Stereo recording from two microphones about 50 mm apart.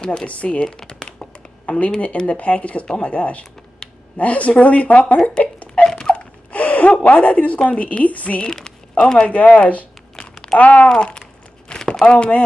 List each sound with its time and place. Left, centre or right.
0.0 s speech: centre
0.7 s a sound: centre
1.7 s speech: left
5.4 s a sound: left
7.6 s speech: left
8.5 s speech: centre; by 10.9 s left
11.7 s crumpling: centre
12.1 s speech: left